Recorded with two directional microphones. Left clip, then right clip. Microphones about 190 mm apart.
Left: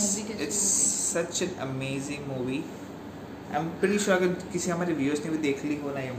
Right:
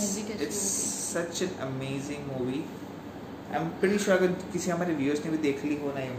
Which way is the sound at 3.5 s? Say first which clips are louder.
Left 1 dB; 20° left (ahead or behind).